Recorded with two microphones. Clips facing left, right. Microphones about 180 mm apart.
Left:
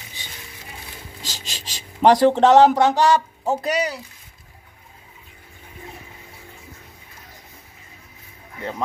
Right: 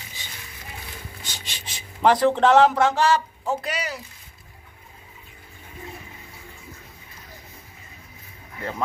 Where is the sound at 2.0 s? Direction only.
40° left (ahead or behind).